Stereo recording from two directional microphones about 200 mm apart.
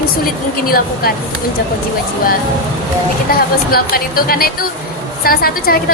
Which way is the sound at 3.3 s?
50° left (ahead or behind).